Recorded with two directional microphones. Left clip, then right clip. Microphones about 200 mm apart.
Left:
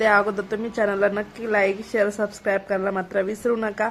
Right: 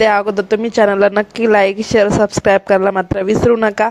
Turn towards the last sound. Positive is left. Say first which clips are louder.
# right 11 dB
turn(degrees=-45)  # may be behind; listen again after turning